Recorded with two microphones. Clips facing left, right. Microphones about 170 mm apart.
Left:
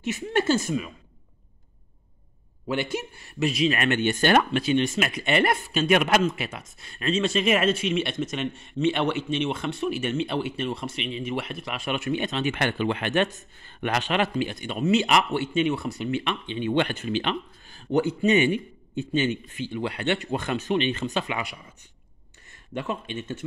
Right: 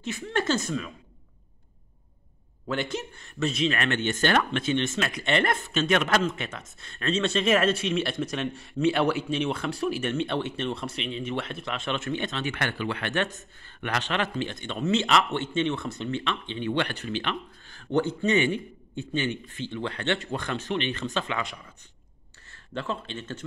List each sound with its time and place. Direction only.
0.0 s a man's voice: 15° left (ahead or behind)
2.7 s a man's voice: 10° left (ahead or behind)